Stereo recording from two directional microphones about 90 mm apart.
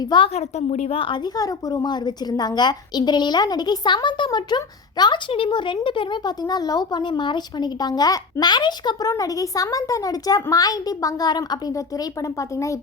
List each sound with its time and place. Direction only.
0.0 s speech: 60° left (ahead or behind)
0.9 s a woman's voice: 80° left; by 5.2 s 55° left (ahead or behind)
5.3 s speech: 70° left (ahead or behind)
6.4 s a woman's voice: 45° left (ahead or behind)